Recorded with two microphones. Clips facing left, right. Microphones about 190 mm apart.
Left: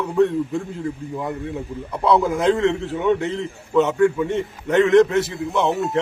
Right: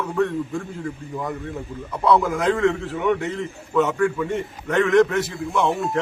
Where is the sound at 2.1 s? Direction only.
25° left (ahead or behind).